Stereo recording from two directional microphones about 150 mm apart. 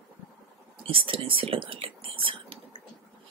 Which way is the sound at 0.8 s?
35° right (ahead or behind).